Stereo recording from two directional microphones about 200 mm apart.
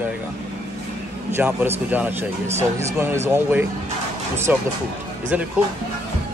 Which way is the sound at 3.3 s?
10° right (ahead or behind).